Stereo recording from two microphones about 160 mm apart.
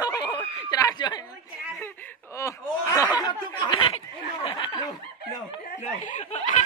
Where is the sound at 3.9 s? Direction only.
35° left (ahead or behind).